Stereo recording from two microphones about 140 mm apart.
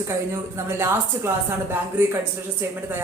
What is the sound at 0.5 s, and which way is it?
Speech, 20° right (ahead or behind).